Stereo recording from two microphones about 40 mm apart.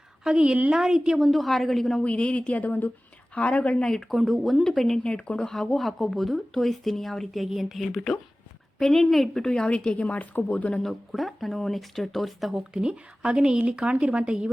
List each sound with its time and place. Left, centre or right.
0.4 s a woman's voice: right
0.7 s a woman's voice: centre
1.2 s a woman's voice: centre
2.0 s speech: left
2.5 s speech: left
3.3 s speech: left
3.8 s speech: centre
4.1 s a woman's voice: centre
5.0 s speech: left
5.5 s a woman's voice: centre
9.3 s speech: centre
9.6 s speech: left
10.8 s a woman's voice: centre
12.7 s speech: right